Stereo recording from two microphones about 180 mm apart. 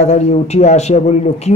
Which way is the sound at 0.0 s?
40° left (ahead or behind).